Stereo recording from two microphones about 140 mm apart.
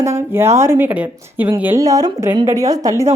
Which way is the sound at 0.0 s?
20° right (ahead or behind).